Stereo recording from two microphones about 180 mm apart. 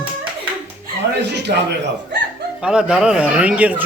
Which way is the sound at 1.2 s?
70° right (ahead or behind).